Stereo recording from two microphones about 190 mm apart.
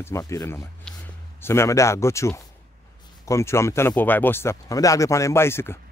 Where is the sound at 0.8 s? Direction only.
10° left (ahead or behind).